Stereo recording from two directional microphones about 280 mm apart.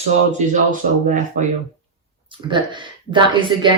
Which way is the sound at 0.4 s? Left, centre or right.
Right.